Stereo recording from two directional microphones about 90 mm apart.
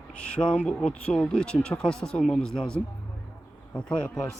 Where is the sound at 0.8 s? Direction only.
10° left (ahead or behind).